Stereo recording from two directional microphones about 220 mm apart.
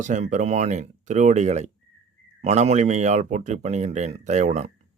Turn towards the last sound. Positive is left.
turn(degrees=-30)  # may be behind; listen again after turning